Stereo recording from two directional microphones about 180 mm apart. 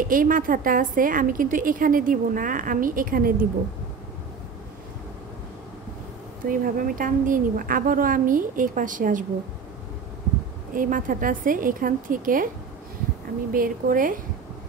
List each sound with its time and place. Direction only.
0.1 s a woman's voice: 50° right (ahead or behind)
6.4 s a woman's voice: 50° right (ahead or behind)
10.7 s a woman's voice: 50° right (ahead or behind)
13.5 s a woman's voice: 50° right (ahead or behind)